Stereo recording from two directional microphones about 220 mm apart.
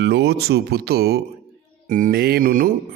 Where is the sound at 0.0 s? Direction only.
50° right (ahead or behind).